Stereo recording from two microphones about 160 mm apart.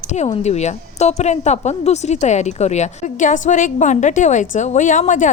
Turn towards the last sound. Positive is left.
turn(degrees=50)  # may be behind; listen again after turning